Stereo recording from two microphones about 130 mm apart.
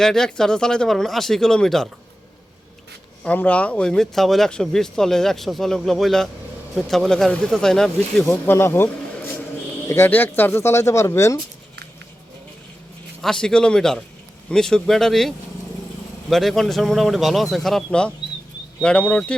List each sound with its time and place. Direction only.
0.0 s speech: 5° left (ahead or behind)
3.2 s speech: 10° left (ahead or behind)
8.3 s speech: 20° left (ahead or behind)
9.9 s speech: 15° left (ahead or behind)
13.2 s speech: 5° left (ahead or behind)
16.3 s speech: centre (ahead or behind)